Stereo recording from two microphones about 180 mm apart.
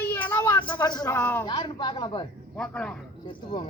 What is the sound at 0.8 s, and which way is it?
Speech, 20° left (ahead or behind).